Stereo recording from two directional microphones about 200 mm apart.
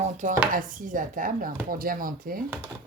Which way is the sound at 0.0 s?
40° right (ahead or behind).